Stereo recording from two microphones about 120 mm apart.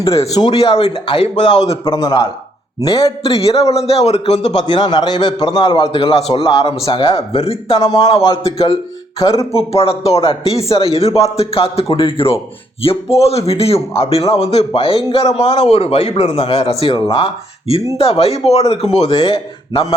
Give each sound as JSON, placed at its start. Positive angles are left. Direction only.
{"t": 0.5, "sound": "a man's voice", "side_deg": 55}
{"t": 1.6, "sound": "a man's voice", "side_deg": 25}
{"t": 3.2, "sound": "a man's voice", "side_deg": 55}
{"t": 4.7, "sound": "a man's voice", "side_deg": 35}
{"t": 5.8, "sound": "a man's voice", "side_deg": 50}
{"t": 9.1, "sound": "a man's voice", "side_deg": 30}
{"t": 9.5, "sound": "a man's voice", "side_deg": 55}